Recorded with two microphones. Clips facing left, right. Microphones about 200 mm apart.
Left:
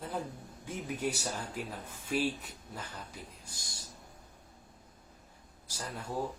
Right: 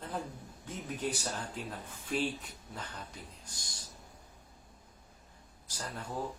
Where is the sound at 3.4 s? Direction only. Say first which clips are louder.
Left 1 dB; 10° left (ahead or behind).